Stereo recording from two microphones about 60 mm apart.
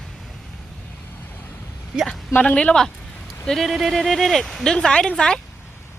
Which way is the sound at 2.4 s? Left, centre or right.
Centre.